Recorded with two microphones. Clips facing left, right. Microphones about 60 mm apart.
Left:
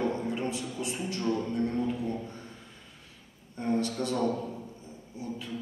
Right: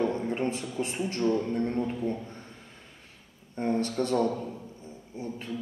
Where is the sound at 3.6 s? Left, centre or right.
Right.